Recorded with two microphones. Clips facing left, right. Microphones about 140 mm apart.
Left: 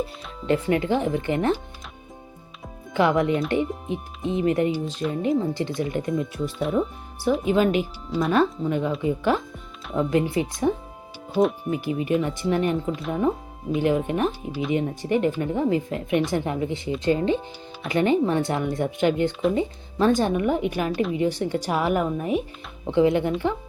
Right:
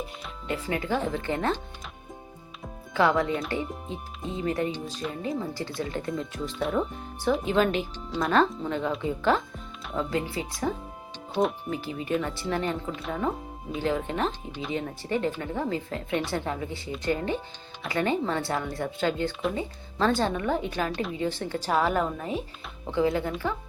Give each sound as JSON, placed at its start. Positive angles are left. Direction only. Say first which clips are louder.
{"t": 0.5, "sound": "speech", "louder": "left 7 dB", "side_deg": 25}
{"t": 2.9, "sound": "speech", "louder": "left 3 dB", "side_deg": 20}
{"t": 11.7, "sound": "speech", "louder": "left 5 dB", "side_deg": 15}
{"t": 12.9, "sound": "speech", "louder": "left 5 dB", "side_deg": 0}
{"t": 13.7, "sound": "speech", "louder": "left 5 dB", "side_deg": 15}